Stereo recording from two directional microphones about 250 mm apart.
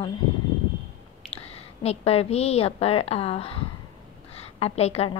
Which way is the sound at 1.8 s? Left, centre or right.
Left.